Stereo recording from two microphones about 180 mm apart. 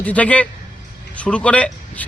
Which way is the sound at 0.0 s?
10° left (ahead or behind).